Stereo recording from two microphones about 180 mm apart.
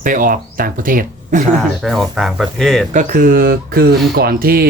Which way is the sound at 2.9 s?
50° right (ahead or behind).